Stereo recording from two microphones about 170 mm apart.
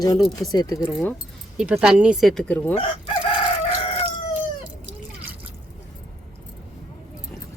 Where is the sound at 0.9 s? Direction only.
5° left (ahead or behind).